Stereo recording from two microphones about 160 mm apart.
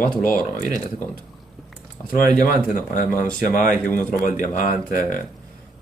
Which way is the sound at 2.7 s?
55° left (ahead or behind).